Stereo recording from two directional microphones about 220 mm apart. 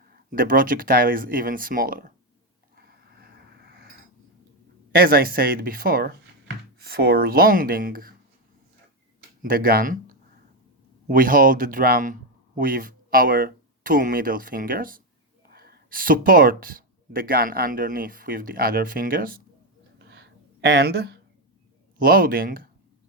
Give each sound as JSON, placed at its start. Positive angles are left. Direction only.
{"t": 0.0, "sound": "speech", "side_deg": -40}
{"t": 2.7, "sound": "a sound", "side_deg": -45}
{"t": 4.9, "sound": "speech", "side_deg": -40}
{"t": 9.4, "sound": "speech", "side_deg": -40}
{"t": 20.0, "sound": "a sound", "side_deg": -50}
{"t": 21.9, "sound": "speech", "side_deg": -40}